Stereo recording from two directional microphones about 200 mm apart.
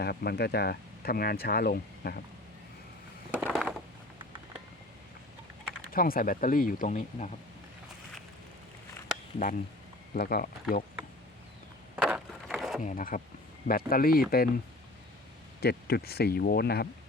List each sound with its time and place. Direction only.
0.0 s speech: 55° left (ahead or behind)
3.4 s a sound: centre (ahead or behind)
5.9 s speech: 45° left (ahead or behind)
10.2 s speech: 50° left (ahead or behind)
11.9 s a sound: 5° right (ahead or behind)
12.8 s speech: 40° left (ahead or behind)
15.6 s speech: 50° left (ahead or behind)